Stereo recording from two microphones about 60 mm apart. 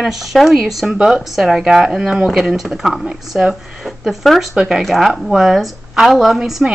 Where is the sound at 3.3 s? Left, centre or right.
Centre.